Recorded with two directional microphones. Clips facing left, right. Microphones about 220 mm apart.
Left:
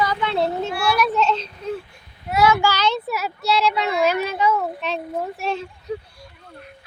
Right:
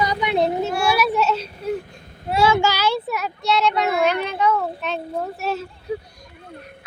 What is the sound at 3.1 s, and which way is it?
Speech, 5° left (ahead or behind).